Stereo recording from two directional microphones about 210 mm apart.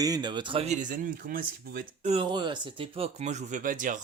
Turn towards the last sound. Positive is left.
turn(degrees=-40)  # may be behind; listen again after turning